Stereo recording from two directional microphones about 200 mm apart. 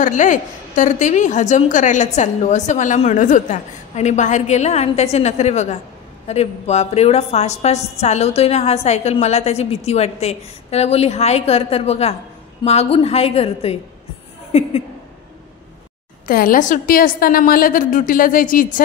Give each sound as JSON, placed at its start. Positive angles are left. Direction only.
{"t": 0.0, "sound": "a woman's voice", "side_deg": 40}
{"t": 16.3, "sound": "a woman's voice", "side_deg": 45}